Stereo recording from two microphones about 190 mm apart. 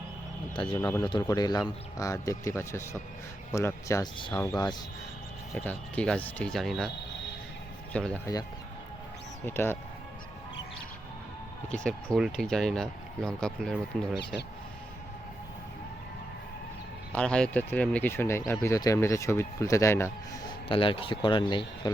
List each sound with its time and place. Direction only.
0.5 s speech: 25° left (ahead or behind)
0.8 s speech: 15° left (ahead or behind)
5.5 s speech: 5° left (ahead or behind)
7.9 s speech: 5° left (ahead or behind)
9.5 s speech: 10° left (ahead or behind)
11.7 s speech: 5° left (ahead or behind)
17.1 s speech: 5° left (ahead or behind)
20.7 s speech: 30° left (ahead or behind)